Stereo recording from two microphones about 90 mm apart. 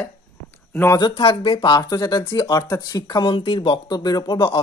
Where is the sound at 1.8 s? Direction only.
45° left (ahead or behind).